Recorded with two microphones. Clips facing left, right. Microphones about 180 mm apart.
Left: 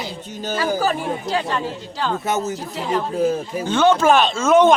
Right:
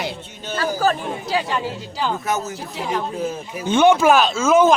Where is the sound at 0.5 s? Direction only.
15° left (ahead or behind).